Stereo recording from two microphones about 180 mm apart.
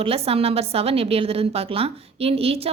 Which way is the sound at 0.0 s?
30° right (ahead or behind).